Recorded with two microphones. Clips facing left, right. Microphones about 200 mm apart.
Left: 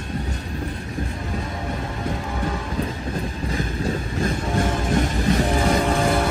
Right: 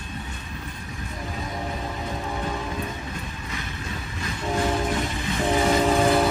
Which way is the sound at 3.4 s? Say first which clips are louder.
Left 10 dB; 35° left (ahead or behind).